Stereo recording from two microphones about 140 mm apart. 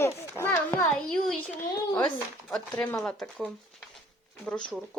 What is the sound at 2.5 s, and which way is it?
A child's voice, 5° left (ahead or behind).